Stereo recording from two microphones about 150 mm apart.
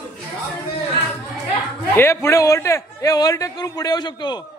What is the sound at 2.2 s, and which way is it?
A man's voice, 20° left (ahead or behind).